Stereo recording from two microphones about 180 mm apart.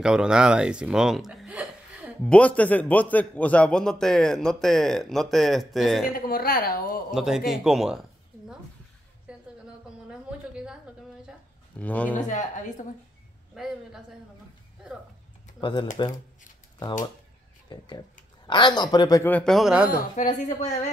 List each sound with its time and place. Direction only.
0.0 s speech: 5° right (ahead or behind)
2.3 s a man's voice: 5° left (ahead or behind)
6.1 s a woman's voice: 55° left (ahead or behind)
7.1 s speech: 5° right (ahead or behind)
9.3 s a sound: 5° right (ahead or behind)
11.8 s speech: 10° left (ahead or behind)
12.2 s speech: 45° left (ahead or behind)
15.6 s a man's voice: 25° left (ahead or behind)
17.6 s a man's voice: 25° left (ahead or behind); by 19.9 s 5° right (ahead or behind)
20.3 s a woman's voice: 40° left (ahead or behind)